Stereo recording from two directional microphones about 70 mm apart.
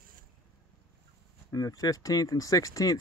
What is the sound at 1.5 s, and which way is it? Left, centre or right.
Speech, left.